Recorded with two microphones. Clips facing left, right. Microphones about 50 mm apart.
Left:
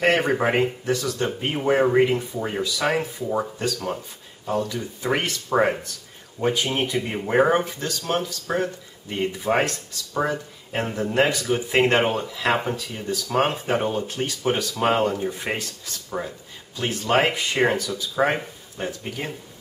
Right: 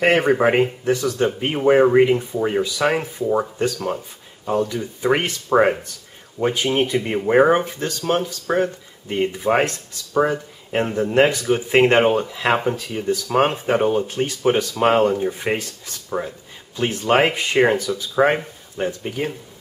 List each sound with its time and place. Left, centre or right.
0.0 s speech: centre